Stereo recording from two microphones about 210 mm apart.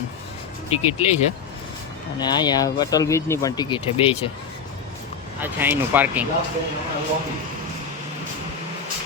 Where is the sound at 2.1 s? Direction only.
20° left (ahead or behind).